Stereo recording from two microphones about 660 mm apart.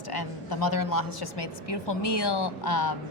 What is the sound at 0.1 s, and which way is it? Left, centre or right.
A woman's voice, left.